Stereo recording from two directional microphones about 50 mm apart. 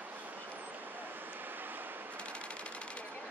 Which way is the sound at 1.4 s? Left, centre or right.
Right.